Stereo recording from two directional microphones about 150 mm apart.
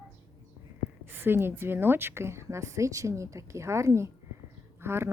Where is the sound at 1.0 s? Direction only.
15° right (ahead or behind).